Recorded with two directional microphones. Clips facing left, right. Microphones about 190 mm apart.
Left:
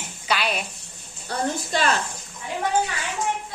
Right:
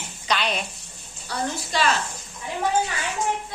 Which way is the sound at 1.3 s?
50° left (ahead or behind).